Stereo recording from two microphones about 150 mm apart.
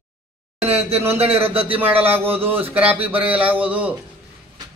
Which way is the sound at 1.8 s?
10° right (ahead or behind).